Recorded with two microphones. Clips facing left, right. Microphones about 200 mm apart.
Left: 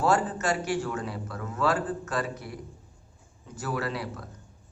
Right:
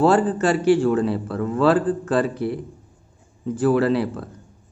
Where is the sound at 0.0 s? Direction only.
30° right (ahead or behind).